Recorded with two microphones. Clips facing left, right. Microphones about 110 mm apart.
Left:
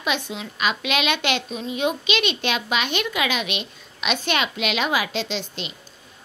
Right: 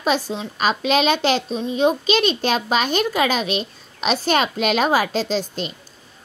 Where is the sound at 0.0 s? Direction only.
35° right (ahead or behind).